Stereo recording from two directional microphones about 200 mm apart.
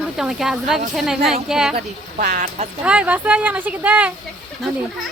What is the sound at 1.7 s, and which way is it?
Speech, 35° right (ahead or behind).